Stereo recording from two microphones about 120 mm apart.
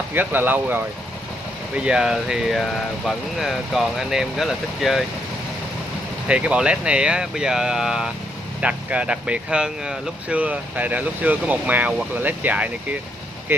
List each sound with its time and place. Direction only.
0.1 s speech: 15° right (ahead or behind)
6.2 s speech: 10° right (ahead or behind)